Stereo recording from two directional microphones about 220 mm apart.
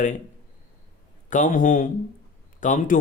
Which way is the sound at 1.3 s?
35° left (ahead or behind).